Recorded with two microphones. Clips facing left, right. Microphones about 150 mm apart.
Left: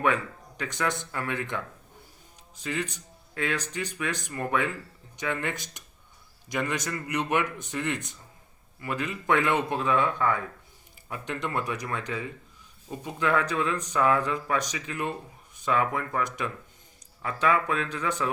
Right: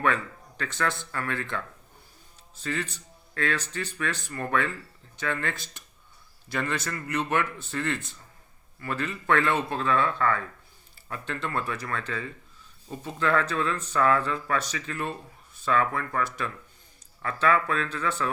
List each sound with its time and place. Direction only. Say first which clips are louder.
0.0 s speech: left 1 dB; 15° left (ahead or behind)